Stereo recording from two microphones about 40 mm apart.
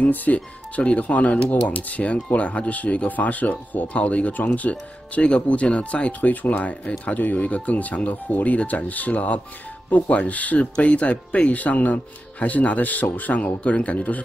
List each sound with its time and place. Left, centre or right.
0.0 s speech: left